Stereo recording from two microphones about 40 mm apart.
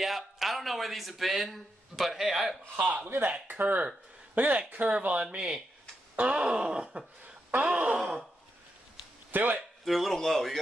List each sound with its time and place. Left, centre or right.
0.0 s speech: centre
2.7 s a man's voice: right
3.2 s a man's voice: right
6.1 s a sound: right
9.3 s speech: right
9.6 s speech: centre